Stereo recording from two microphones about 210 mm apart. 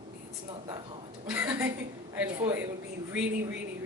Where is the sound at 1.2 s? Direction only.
5° right (ahead or behind).